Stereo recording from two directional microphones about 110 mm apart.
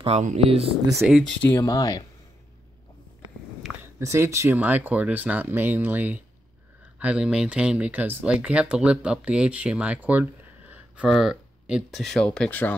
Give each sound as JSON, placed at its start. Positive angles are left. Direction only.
{"t": 0.0, "sound": "speech", "side_deg": -85}
{"t": 1.3, "sound": "speech", "side_deg": 15}
{"t": 1.6, "sound": "speech", "side_deg": 35}
{"t": 3.8, "sound": "speech", "side_deg": -25}
{"t": 4.6, "sound": "speech", "side_deg": -15}